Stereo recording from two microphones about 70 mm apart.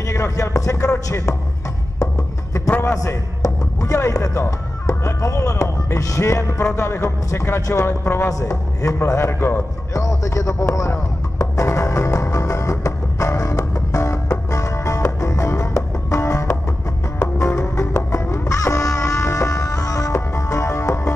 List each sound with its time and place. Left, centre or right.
0.0 s a man's voice: left
2.8 s a man's voice: left
6.3 s music: left
8.3 s a man's voice: left
10.9 s music: left